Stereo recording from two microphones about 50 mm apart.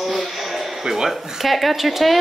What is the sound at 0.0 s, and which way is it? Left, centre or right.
A woman's voice, centre.